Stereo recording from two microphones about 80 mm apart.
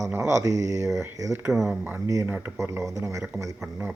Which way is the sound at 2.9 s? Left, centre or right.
Right.